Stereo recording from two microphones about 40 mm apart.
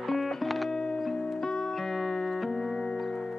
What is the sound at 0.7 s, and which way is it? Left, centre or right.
Music, centre.